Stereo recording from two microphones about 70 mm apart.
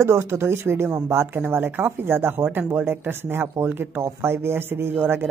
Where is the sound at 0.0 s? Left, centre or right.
Right.